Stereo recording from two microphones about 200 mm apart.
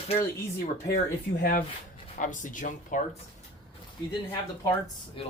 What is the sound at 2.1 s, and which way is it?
Speech, 40° left (ahead or behind).